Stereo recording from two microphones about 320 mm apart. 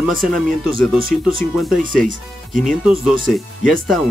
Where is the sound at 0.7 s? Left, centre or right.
Right.